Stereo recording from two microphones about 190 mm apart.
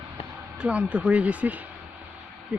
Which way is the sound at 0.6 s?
5° right (ahead or behind).